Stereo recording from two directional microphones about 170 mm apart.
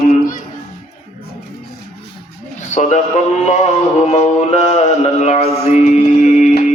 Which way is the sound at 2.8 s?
45° left (ahead or behind).